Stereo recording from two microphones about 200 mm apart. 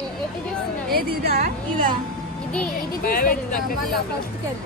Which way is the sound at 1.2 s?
50° right (ahead or behind).